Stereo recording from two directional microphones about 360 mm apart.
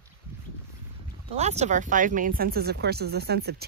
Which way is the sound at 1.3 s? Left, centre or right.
Centre.